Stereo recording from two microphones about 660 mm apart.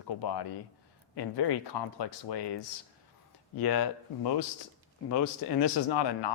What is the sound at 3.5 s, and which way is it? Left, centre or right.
Speech, left.